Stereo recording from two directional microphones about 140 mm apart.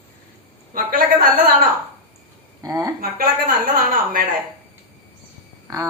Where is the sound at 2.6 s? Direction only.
25° right (ahead or behind).